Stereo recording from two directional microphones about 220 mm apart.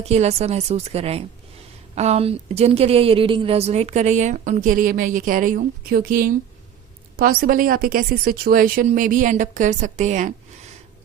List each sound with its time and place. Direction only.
0.0 s a woman's voice: 30° right (ahead or behind)